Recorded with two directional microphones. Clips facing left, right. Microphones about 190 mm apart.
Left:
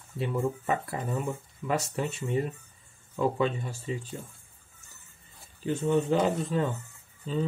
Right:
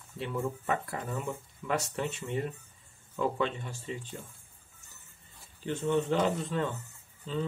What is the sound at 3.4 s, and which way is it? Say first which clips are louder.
Speech: left 4 dB; 10° left (ahead or behind).